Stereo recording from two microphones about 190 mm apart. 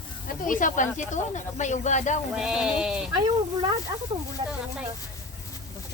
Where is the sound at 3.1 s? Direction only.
25° right (ahead or behind).